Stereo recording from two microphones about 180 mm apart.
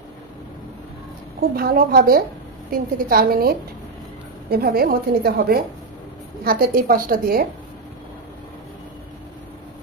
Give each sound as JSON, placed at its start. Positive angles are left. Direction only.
{"t": 1.5, "sound": "a woman's voice", "side_deg": -60}